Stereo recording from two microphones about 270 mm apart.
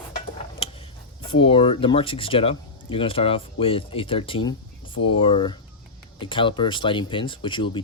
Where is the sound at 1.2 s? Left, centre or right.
Centre.